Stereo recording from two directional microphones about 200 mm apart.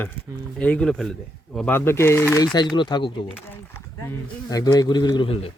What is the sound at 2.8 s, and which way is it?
Speech, 20° left (ahead or behind).